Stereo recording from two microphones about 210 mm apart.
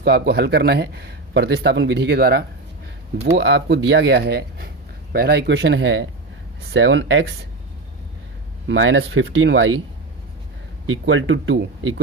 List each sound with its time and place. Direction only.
0.0 s speech: 50° right (ahead or behind)
8.6 s speech: 60° right (ahead or behind)
10.8 s speech: 65° right (ahead or behind)